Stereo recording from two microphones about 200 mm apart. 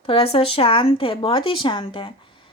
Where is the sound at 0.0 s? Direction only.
30° left (ahead or behind).